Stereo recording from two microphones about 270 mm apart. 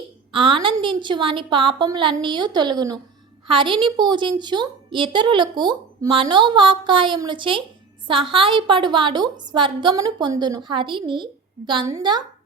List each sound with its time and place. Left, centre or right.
0.3 s a woman's voice: centre